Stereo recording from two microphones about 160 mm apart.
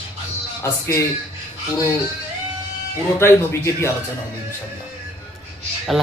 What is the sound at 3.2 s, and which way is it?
Speech, 15° left (ahead or behind).